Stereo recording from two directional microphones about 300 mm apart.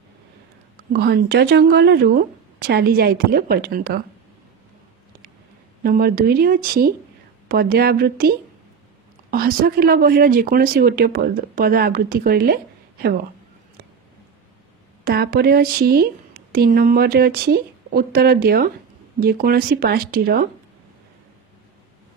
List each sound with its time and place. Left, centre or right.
0.9 s speech: right
5.8 s speech: right
15.0 s speech: right